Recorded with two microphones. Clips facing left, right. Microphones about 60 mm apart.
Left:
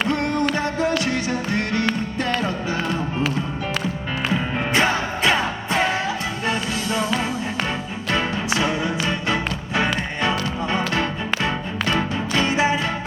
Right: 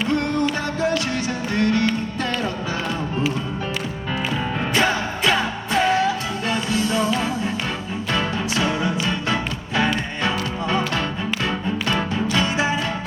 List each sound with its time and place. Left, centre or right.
0.1 s music: left
4.7 s music: left
8.1 s music: left